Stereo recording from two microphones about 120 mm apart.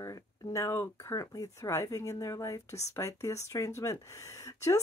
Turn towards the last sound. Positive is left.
turn(degrees=25)  # may be behind; listen again after turning